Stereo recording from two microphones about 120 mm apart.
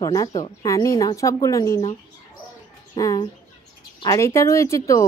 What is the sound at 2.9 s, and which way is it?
Speech, 30° left (ahead or behind).